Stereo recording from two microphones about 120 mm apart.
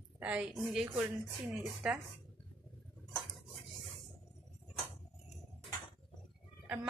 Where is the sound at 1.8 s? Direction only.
5° right (ahead or behind).